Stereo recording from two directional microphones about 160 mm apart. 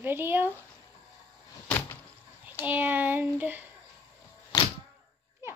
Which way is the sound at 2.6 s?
10° right (ahead or behind).